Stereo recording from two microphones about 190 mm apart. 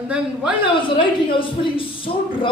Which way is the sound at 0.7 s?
25° left (ahead or behind).